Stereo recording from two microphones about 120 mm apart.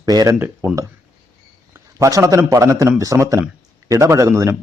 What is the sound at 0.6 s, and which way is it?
Speech, 20° right (ahead or behind).